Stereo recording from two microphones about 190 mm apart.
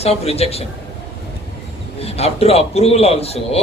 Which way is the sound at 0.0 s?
35° left (ahead or behind).